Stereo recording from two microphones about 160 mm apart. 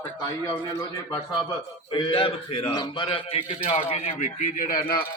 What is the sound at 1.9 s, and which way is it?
A man's voice, 35° left (ahead or behind).